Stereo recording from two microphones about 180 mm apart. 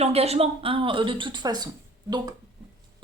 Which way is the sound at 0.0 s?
35° right (ahead or behind).